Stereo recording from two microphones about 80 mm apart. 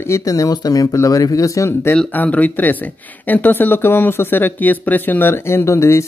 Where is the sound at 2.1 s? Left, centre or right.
Centre.